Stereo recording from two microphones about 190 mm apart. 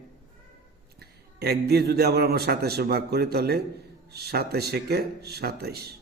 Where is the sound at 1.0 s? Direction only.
55° right (ahead or behind).